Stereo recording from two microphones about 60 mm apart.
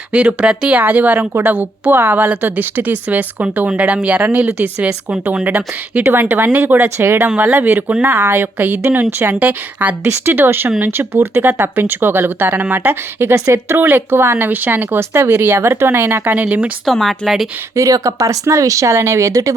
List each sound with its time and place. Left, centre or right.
0.1 s a woman's voice: centre
6.0 s a woman's voice: right
9.3 s a woman's voice: right
10.0 s a woman's voice: right
11.1 s speech: right
13.8 s speech: right
16.8 s speech: centre
17.7 s speech: right